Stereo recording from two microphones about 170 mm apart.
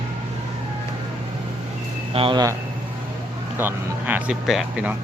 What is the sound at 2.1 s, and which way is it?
Speech, 30° right (ahead or behind).